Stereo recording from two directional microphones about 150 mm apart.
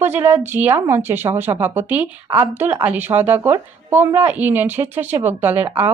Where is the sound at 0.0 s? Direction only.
15° right (ahead or behind).